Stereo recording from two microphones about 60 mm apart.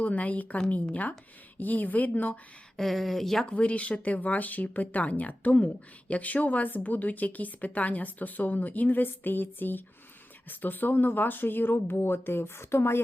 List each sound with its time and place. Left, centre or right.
0.0 s speech: left
2.7 s speech: centre
3.4 s speech: left